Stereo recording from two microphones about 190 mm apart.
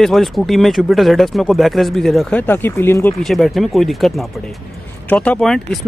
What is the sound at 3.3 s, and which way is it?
Speech, centre (ahead or behind).